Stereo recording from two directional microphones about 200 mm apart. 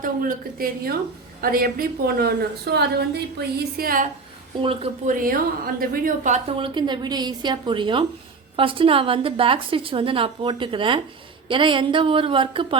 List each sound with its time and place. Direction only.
0.0 s a woman's voice: 45° right (ahead or behind)
4.6 s a woman's voice: 30° right (ahead or behind)
5.1 s a woman's voice: 45° right (ahead or behind); by 12.6 s 25° right (ahead or behind)